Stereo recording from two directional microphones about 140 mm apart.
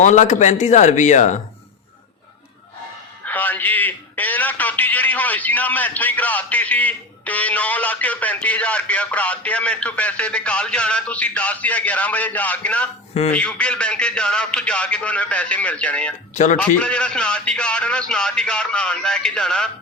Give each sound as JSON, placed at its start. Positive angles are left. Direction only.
{"t": 0.0, "sound": "a man's voice", "side_deg": 60}
{"t": 3.2, "sound": "a man's voice", "side_deg": 10}